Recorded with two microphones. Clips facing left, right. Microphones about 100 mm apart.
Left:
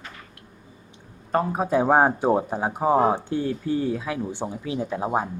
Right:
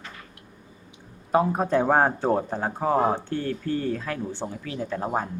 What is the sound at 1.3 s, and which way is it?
Speech, centre (ahead or behind).